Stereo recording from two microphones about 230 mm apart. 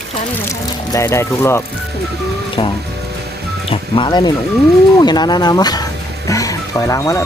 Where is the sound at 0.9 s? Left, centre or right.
Centre.